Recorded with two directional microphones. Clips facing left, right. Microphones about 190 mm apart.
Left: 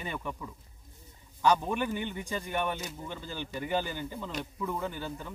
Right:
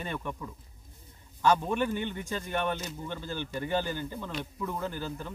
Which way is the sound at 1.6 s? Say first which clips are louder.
Right 2 dB; 10° left (ahead or behind).